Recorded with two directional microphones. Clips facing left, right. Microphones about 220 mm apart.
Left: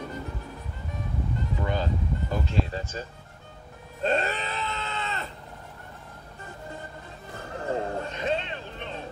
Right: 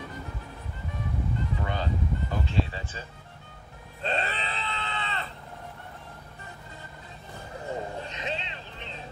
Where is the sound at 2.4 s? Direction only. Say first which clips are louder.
Left 1 dB; 45° left (ahead or behind).